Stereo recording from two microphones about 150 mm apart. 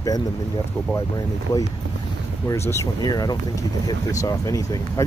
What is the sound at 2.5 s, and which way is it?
Speech, 15° left (ahead or behind).